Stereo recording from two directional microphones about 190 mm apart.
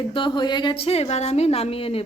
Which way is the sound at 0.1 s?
25° left (ahead or behind).